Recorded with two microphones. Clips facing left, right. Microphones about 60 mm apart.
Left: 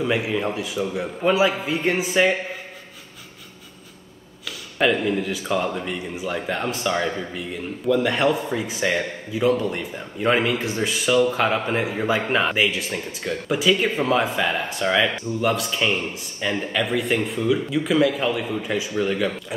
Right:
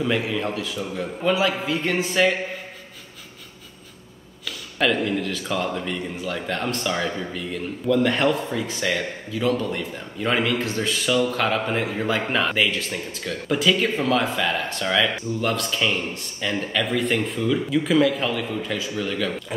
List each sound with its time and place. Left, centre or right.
0.0 s speech: centre
4.5 s speech: centre